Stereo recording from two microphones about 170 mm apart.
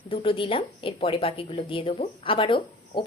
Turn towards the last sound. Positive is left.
turn(degrees=30)  # may be behind; listen again after turning